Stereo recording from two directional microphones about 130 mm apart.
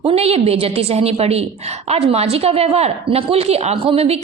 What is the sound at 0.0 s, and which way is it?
A woman's voice, 45° right (ahead or behind).